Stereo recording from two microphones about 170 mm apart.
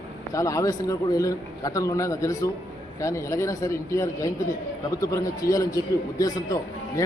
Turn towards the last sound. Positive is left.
turn(degrees=20)  # may be behind; listen again after turning